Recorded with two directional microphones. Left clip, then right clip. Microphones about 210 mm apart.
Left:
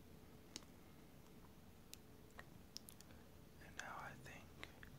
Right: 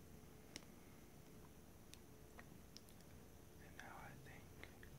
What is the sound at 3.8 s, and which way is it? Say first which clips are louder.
Whispering: left 6 dB; 30° left (ahead or behind).